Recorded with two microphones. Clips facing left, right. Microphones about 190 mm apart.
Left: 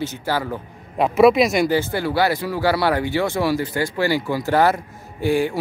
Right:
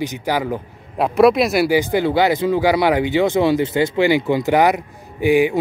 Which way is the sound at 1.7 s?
15° right (ahead or behind).